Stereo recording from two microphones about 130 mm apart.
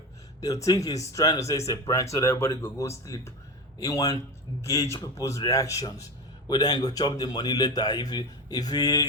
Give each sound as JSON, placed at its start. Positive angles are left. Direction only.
{"t": 0.4, "sound": "a man's voice", "side_deg": 25}